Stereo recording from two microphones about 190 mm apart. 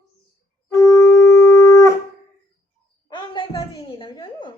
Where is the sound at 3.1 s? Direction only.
25° left (ahead or behind).